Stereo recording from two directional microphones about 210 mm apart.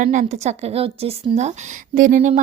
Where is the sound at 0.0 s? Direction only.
35° right (ahead or behind).